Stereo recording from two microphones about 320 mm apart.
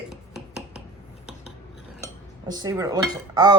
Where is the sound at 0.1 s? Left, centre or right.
Centre.